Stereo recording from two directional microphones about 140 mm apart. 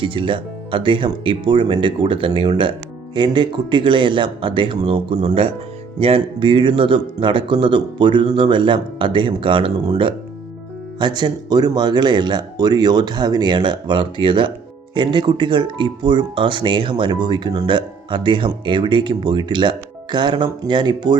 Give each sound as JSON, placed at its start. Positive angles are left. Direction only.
{"t": 0.0, "sound": "speech", "side_deg": -40}